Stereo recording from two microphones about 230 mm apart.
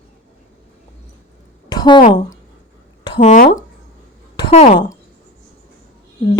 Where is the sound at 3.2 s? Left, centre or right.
Left.